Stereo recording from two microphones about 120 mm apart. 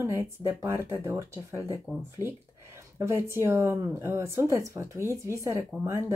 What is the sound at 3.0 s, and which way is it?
Speech, 20° right (ahead or behind).